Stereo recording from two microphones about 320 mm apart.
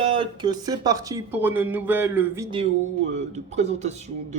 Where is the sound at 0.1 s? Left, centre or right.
Centre.